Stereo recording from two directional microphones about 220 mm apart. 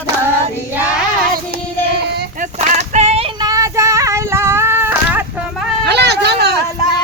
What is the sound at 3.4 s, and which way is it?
Child singing, 15° right (ahead or behind).